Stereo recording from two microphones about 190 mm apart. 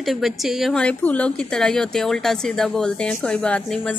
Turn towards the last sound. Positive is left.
turn(degrees=5)  # may be behind; listen again after turning